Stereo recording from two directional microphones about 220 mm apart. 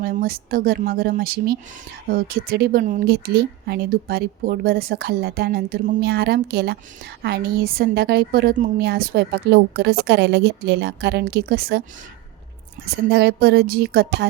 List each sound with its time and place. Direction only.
0.0 s a woman's voice: 40° right (ahead or behind)
12.8 s a woman's voice: 45° right (ahead or behind)